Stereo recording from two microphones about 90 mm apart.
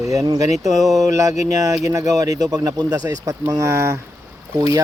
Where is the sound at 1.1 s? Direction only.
40° right (ahead or behind).